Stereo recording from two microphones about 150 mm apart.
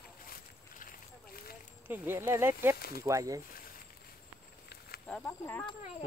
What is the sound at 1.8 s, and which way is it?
Speech, 10° right (ahead or behind).